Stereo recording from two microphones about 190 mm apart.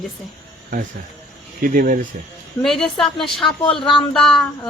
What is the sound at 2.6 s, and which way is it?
A woman's voice, centre (ahead or behind).